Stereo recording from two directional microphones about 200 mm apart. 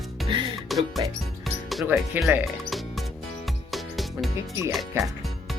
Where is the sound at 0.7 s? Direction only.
Centre (ahead or behind).